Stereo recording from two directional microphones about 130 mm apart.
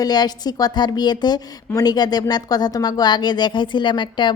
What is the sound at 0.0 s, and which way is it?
A woman's voice, 30° left (ahead or behind).